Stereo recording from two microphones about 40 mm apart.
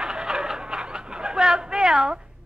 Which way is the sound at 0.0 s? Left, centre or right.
Centre.